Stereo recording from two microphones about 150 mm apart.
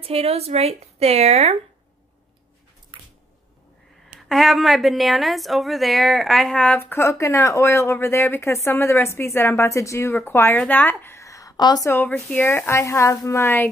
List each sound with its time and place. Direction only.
0.0 s a woman's voice: 40° right (ahead or behind)
2.9 s squish: 35° right (ahead or behind)
4.1 s a woman's voice: centre (ahead or behind)